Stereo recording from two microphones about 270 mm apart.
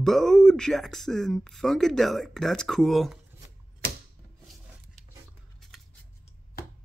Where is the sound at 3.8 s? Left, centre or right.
Right.